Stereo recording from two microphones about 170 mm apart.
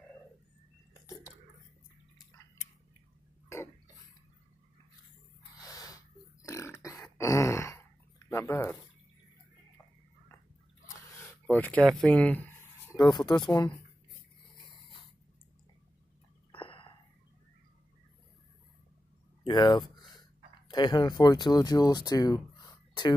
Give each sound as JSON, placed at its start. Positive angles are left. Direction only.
{"t": 5.6, "sound": "burping", "side_deg": 20}
{"t": 11.4, "sound": "speech", "side_deg": 10}
{"t": 12.9, "sound": "speech", "side_deg": 25}
{"t": 16.5, "sound": "a sound", "side_deg": 30}
{"t": 19.4, "sound": "a sound", "side_deg": 25}
{"t": 20.6, "sound": "speech", "side_deg": 25}